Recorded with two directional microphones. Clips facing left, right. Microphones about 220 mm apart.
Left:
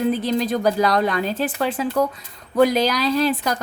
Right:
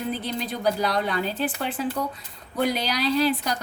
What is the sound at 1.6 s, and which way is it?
A woman's voice, 90° left.